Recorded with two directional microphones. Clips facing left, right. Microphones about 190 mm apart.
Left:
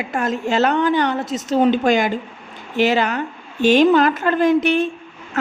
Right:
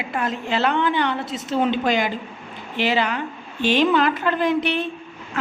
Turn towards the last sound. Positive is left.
turn(degrees=45)  # may be behind; listen again after turning